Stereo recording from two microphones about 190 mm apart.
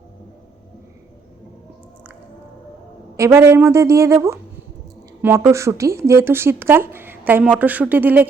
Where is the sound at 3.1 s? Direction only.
15° right (ahead or behind).